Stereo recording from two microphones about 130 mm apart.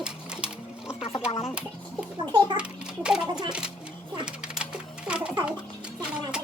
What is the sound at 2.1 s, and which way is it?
Speech, 35° right (ahead or behind).